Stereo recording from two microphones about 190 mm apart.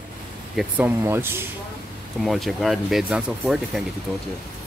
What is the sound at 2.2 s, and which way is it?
Speech, centre (ahead or behind).